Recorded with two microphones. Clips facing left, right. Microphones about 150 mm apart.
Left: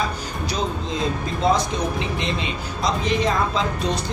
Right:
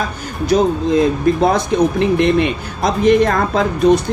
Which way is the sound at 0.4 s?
60° right (ahead or behind).